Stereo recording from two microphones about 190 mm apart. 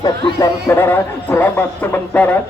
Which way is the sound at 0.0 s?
20° left (ahead or behind).